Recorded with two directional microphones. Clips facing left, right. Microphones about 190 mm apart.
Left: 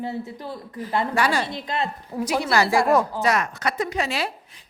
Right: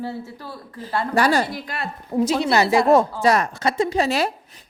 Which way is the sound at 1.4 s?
25° left (ahead or behind).